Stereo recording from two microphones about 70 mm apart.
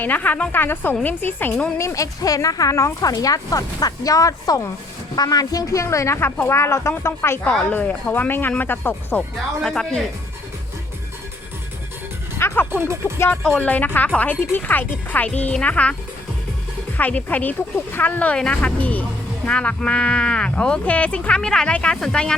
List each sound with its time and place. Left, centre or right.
0.0 s speech: left
1.8 s speech: left
5.1 s speech: left
7.7 s speech: left
9.6 s speech: centre
12.4 s music: left
12.7 s music: right
13.1 s speech: left
13.6 s speech: left
17.0 s speech: left